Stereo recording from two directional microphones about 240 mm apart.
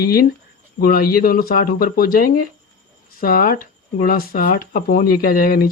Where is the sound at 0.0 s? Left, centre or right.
Left.